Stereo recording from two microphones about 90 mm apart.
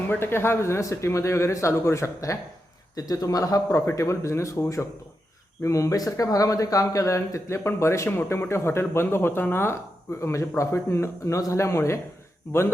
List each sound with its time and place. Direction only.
0.1 s speech: 25° left (ahead or behind)